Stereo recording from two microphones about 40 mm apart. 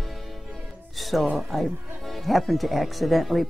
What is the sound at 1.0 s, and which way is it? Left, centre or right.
Speech, centre.